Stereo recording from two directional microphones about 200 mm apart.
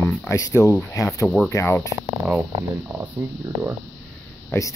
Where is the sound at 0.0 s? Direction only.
10° left (ahead or behind).